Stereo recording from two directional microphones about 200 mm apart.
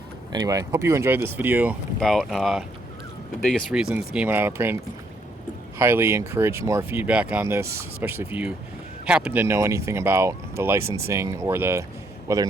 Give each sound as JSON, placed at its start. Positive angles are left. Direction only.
{"t": 0.3, "sound": "speech", "side_deg": -15}
{"t": 2.0, "sound": "speech", "side_deg": 0}
{"t": 5.8, "sound": "speech", "side_deg": -10}
{"t": 10.8, "sound": "speech", "side_deg": -90}
{"t": 11.1, "sound": "speech", "side_deg": -15}